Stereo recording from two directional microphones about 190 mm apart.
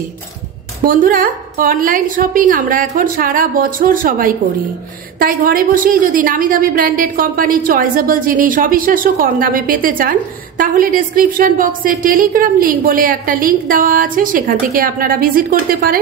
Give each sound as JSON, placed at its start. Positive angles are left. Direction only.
{"t": 0.8, "sound": "a woman's voice", "side_deg": -45}